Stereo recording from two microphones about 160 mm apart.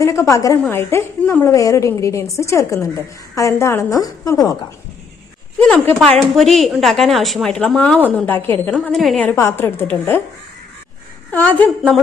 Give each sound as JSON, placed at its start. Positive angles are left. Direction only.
{"t": 0.0, "sound": "a woman's voice", "side_deg": 20}
{"t": 5.6, "sound": "a woman's voice", "side_deg": 10}
{"t": 9.2, "sound": "a woman's voice", "side_deg": 15}
{"t": 11.3, "sound": "a woman's voice", "side_deg": 10}